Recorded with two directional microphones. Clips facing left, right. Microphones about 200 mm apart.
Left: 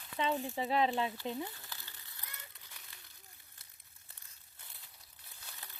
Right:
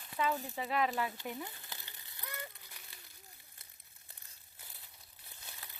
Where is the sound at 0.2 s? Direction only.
25° left (ahead or behind).